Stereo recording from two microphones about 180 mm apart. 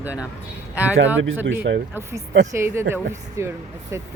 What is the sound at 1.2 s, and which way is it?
Speech, 90° right.